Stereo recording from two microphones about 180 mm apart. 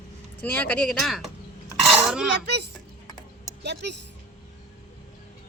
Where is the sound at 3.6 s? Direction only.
70° right (ahead or behind).